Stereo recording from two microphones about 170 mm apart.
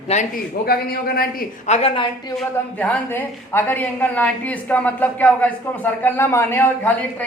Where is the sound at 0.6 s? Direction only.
60° left (ahead or behind).